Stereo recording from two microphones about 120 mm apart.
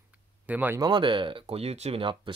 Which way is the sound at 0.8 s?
40° right (ahead or behind).